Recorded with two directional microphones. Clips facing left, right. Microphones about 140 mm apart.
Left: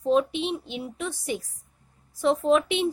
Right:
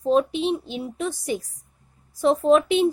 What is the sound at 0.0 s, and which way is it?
A woman's voice, 40° right (ahead or behind).